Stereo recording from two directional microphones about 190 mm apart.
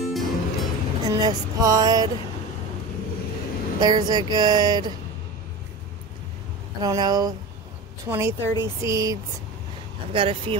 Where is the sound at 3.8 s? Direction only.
20° right (ahead or behind).